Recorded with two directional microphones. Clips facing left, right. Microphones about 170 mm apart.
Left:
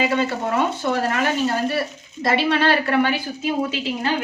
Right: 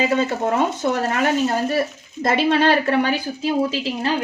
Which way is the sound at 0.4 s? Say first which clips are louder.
Right 2 dB; 45° right (ahead or behind).